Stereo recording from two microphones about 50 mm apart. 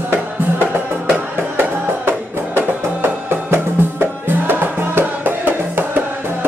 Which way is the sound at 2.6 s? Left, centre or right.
Right.